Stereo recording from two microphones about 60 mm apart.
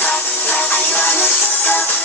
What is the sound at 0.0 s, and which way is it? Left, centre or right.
Music, left.